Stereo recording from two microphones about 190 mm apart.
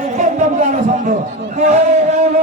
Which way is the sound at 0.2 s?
40° right (ahead or behind).